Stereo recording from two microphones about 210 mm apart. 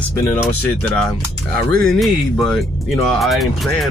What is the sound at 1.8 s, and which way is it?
Speech, centre (ahead or behind).